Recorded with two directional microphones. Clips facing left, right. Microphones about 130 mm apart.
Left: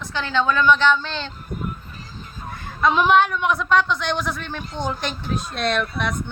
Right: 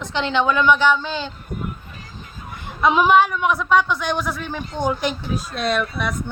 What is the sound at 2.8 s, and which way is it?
A man's voice, 10° right (ahead or behind).